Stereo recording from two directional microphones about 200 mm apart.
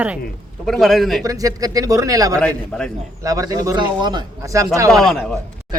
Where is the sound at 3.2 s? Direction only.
15° right (ahead or behind).